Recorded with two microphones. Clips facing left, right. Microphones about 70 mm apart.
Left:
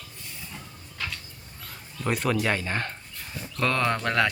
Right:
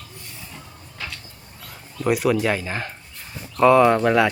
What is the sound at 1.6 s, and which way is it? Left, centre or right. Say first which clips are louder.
Speech: right 7 dB; centre.